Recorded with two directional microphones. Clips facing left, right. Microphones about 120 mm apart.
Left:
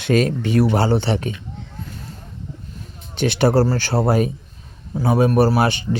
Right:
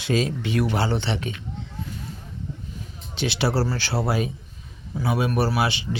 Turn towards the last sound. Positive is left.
turn(degrees=50)  # may be behind; listen again after turning